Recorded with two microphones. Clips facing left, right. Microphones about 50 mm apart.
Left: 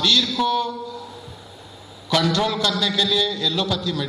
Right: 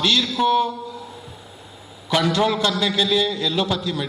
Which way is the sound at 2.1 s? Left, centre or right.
Centre.